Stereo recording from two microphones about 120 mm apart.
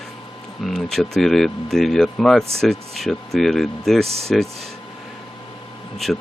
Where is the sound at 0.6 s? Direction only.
5° left (ahead or behind).